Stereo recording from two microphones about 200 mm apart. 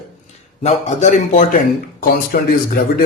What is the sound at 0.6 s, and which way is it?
Speech, 35° left (ahead or behind).